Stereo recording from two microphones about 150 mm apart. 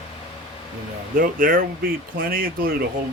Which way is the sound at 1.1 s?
65° right (ahead or behind).